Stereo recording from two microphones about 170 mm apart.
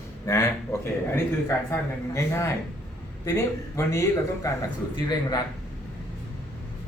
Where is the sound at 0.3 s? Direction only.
15° left (ahead or behind).